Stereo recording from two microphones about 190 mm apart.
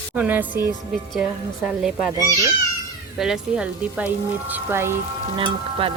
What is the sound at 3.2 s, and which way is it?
Speech, 5° right (ahead or behind).